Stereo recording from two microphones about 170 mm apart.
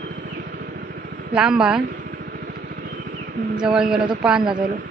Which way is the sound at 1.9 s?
70° right (ahead or behind).